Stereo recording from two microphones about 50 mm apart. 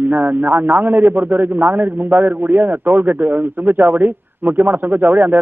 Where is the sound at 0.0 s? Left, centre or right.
Right.